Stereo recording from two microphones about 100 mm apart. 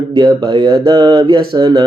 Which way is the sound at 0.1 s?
50° right (ahead or behind).